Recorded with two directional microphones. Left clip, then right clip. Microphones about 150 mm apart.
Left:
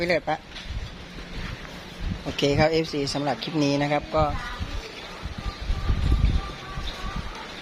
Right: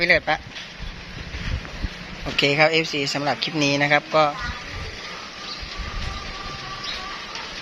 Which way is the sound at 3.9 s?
Centre (ahead or behind).